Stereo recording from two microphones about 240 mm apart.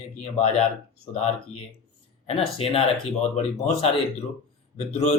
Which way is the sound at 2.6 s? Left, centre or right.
Left.